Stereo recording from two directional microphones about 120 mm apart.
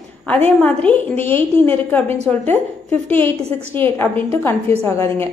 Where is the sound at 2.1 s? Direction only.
65° right (ahead or behind).